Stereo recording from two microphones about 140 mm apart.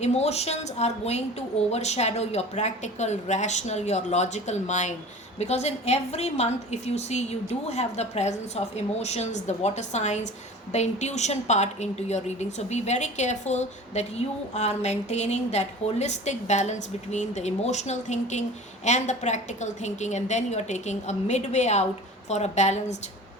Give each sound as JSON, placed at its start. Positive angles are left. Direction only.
{"t": 0.0, "sound": "a woman's voice", "side_deg": 50}